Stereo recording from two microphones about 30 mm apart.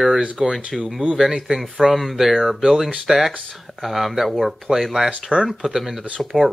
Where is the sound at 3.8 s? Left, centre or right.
Centre.